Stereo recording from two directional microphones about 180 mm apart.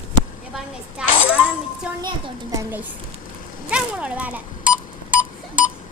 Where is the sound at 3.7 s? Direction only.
5° right (ahead or behind).